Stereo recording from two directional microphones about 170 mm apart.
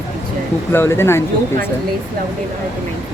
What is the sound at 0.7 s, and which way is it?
Speech, 15° left (ahead or behind).